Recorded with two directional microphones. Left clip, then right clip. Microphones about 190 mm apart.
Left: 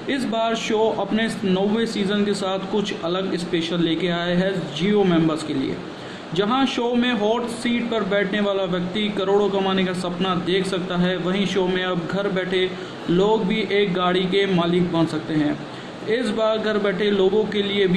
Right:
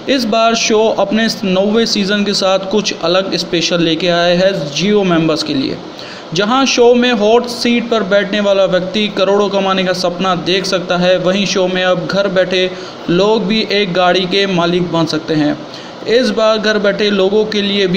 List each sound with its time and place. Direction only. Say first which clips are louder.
0.3 s a man's voice: right 11 dB; 10° right (ahead or behind)